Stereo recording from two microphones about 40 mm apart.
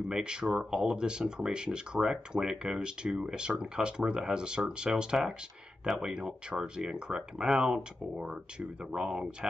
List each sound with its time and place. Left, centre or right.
0.1 s speech: right
6.1 s speech: centre